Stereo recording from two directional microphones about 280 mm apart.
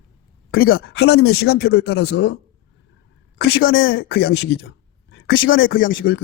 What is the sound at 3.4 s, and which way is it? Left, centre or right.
Speech, left.